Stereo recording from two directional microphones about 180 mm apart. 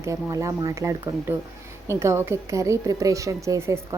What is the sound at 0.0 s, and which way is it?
A woman's voice, 15° right (ahead or behind).